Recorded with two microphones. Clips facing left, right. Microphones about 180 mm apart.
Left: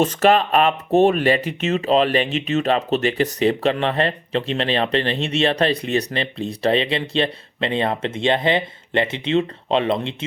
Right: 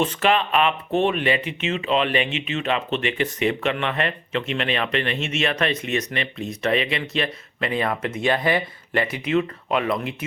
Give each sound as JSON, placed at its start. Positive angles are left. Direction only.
{"t": 0.0, "sound": "speech", "side_deg": 40}